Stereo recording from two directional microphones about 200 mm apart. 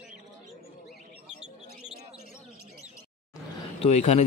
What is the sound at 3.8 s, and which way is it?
Speech, 35° left (ahead or behind).